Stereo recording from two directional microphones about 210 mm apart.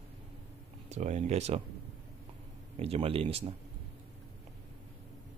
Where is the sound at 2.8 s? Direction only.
30° right (ahead or behind).